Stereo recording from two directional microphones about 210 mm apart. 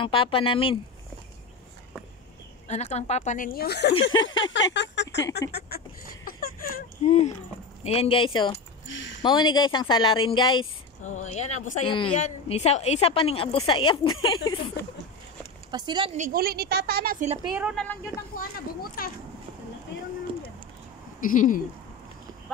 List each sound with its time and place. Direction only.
0.0 s a woman's voice: 25° left (ahead or behind)
2.7 s a woman's voice: 30° left (ahead or behind); by 3.9 s 50° left (ahead or behind)
4.2 s speech: 65° left (ahead or behind)
6.2 s a sound: 45° left (ahead or behind)
7.8 s a woman's voice: 25° left (ahead or behind)
8.8 s a sound: 60° left (ahead or behind)
9.2 s a woman's voice: 20° left (ahead or behind)
11.2 s a woman's voice: 30° left (ahead or behind)
15.7 s speech: 20° right (ahead or behind)
16.2 s a woman's voice: 45° right (ahead or behind)
17.5 s a woman's voice: 5° right (ahead or behind)
18.3 s speech: 45° left (ahead or behind)
21.2 s a woman's voice: 40° left (ahead or behind)